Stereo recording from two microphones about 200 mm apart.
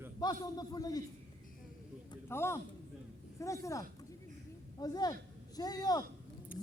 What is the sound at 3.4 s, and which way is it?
A man's voice, 15° left (ahead or behind).